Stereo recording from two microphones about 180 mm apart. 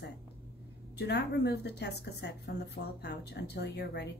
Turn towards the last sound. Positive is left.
turn(degrees=65)  # may be behind; listen again after turning